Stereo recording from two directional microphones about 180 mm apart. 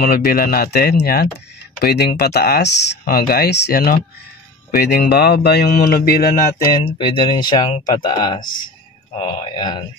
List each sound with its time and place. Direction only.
0.0 s speech: 60° left (ahead or behind)
6.8 s speech: 30° left (ahead or behind)